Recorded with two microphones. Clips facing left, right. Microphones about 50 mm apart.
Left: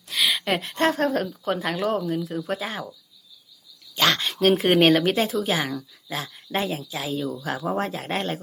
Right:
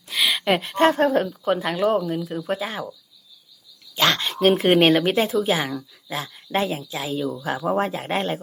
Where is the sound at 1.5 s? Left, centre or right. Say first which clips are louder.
Right 4 dB; centre.